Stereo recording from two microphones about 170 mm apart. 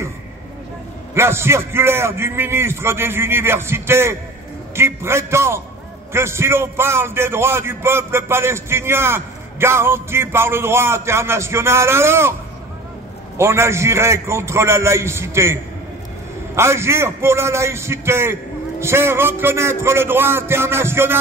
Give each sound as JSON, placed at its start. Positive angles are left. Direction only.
{"t": 1.1, "sound": "a man's voice", "side_deg": -15}
{"t": 13.4, "sound": "a man's voice", "side_deg": -15}
{"t": 16.5, "sound": "a man's voice", "side_deg": -15}